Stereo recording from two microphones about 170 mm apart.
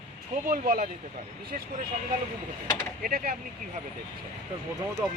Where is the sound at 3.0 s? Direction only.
60° right (ahead or behind).